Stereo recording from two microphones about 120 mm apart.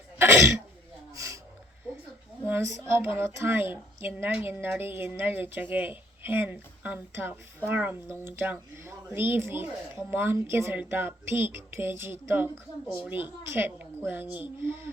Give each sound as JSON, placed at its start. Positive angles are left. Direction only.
{"t": 0.2, "sound": "sneeze", "side_deg": -20}
{"t": 1.1, "sound": "a sound", "side_deg": -25}
{"t": 2.5, "sound": "a woman's voice", "side_deg": -25}